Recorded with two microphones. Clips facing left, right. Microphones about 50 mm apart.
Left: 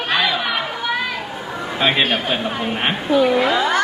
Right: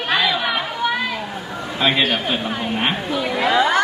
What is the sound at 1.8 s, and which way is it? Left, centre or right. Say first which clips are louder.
A woman's voice: even; centre.